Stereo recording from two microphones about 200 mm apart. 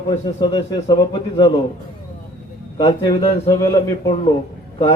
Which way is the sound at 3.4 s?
15° left (ahead or behind).